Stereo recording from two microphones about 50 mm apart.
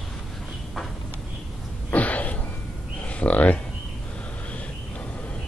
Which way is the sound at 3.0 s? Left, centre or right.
Left.